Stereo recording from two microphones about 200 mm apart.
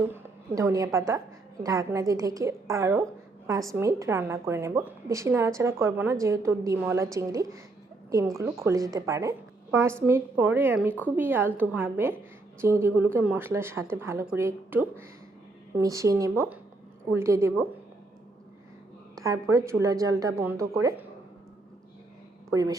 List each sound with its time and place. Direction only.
0.1 s a woman's voice: 15° right (ahead or behind)
19.1 s a woman's voice: 15° right (ahead or behind)
22.4 s speech: 15° right (ahead or behind)